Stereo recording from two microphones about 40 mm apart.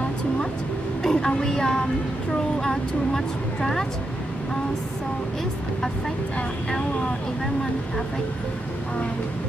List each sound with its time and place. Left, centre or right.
1.0 s speech: centre